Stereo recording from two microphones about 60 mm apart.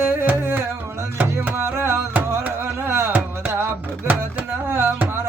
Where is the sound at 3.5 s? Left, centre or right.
Right.